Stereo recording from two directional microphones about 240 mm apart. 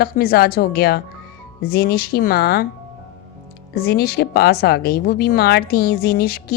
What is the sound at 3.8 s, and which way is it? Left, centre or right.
A woman's voice, left.